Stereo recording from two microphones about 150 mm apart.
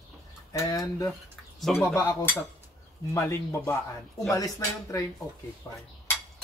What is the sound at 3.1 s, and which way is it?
Speech, 20° left (ahead or behind).